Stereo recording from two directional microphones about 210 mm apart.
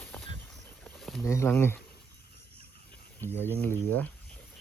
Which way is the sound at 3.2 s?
10° left (ahead or behind).